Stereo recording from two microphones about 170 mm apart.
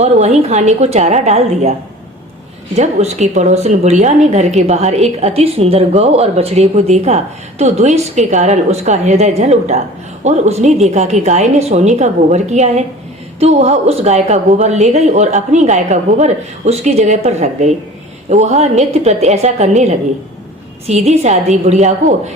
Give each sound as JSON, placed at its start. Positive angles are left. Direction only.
{"t": 0.0, "sound": "a woman's voice", "side_deg": -40}
{"t": 2.7, "sound": "a woman's voice", "side_deg": -40}